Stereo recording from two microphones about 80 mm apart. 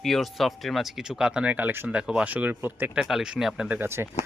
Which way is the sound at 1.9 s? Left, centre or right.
Centre.